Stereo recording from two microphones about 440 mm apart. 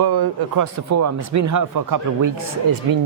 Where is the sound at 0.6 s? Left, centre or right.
Right.